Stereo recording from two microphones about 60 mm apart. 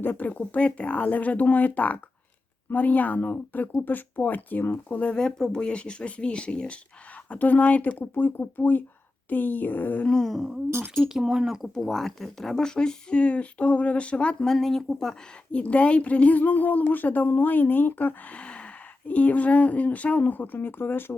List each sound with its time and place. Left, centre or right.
0.0 s speech: left
10.1 s a sound: centre
10.7 s speech: right
11.0 s speech: centre
11.7 s speech: centre
14.4 s speech: centre
15.5 s speech: left
18.3 s speech: centre; by 21.2 s left